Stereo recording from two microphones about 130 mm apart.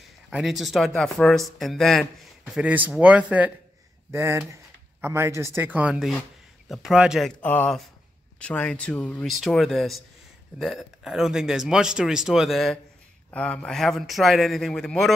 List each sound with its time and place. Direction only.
0.3 s a man's voice: centre (ahead or behind)
2.6 s speech: 10° right (ahead or behind)
7.4 s speech: 10° left (ahead or behind)